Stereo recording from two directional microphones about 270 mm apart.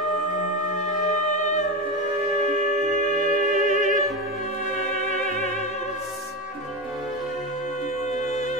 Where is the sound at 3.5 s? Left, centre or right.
Right.